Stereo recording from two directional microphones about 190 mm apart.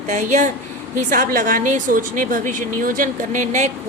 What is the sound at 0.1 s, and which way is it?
A woman's voice, 40° right (ahead or behind).